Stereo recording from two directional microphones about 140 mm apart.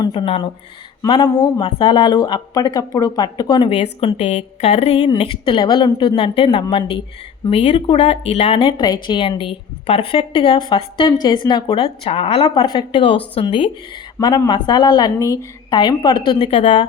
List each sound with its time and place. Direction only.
0.0 s a woman's voice: 35° left (ahead or behind)
3.7 s a woman's voice: 45° left (ahead or behind)
7.5 s a woman's voice: 45° left (ahead or behind)